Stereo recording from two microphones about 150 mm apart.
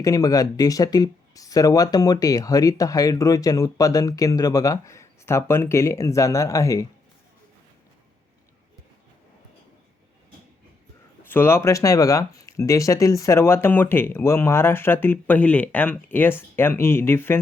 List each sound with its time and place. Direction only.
0.0 s speech: 25° left (ahead or behind)
11.3 s speech: 15° left (ahead or behind)